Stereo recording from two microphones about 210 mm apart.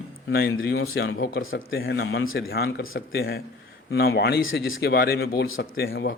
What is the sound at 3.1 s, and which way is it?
Speech, 50° left (ahead or behind).